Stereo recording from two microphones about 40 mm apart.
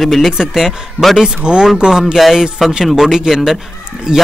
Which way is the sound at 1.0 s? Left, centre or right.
Left.